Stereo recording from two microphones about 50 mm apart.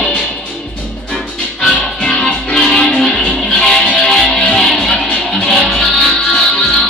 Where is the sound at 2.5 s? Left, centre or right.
Centre.